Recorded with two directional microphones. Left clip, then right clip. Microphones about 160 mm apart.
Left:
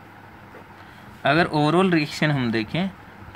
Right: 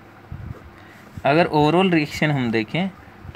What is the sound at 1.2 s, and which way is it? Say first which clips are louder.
Speech: right 3 dB; 20° right (ahead or behind).